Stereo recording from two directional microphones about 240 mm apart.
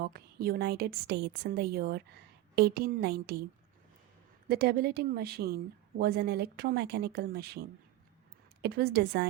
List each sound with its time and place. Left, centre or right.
0.0 s a woman's voice: right
4.4 s a woman's voice: right
8.6 s a woman's voice: right